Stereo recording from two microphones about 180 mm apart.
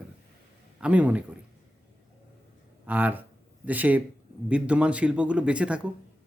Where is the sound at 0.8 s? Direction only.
5° right (ahead or behind).